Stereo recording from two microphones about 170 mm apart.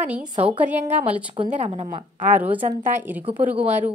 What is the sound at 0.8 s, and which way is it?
A woman's voice, 40° right (ahead or behind).